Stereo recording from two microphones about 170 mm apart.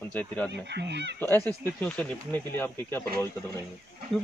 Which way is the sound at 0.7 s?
90° right.